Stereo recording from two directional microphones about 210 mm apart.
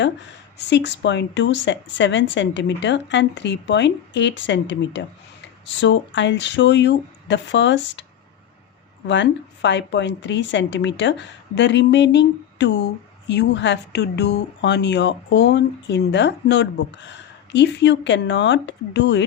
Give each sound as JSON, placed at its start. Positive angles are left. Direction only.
{"t": 0.7, "sound": "speech", "side_deg": 55}
{"t": 9.0, "sound": "speech", "side_deg": 60}